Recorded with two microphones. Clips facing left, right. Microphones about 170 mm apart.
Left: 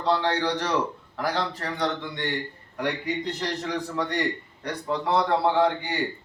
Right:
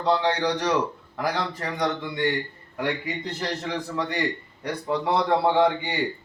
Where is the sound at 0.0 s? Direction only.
15° right (ahead or behind).